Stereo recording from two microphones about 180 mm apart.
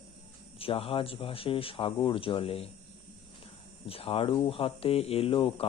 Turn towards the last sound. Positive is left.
turn(degrees=30)  # may be behind; listen again after turning